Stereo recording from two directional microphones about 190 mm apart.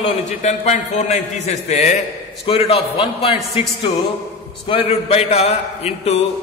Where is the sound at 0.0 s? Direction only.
35° left (ahead or behind).